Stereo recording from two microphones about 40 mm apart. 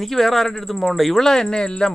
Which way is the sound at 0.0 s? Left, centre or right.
Centre.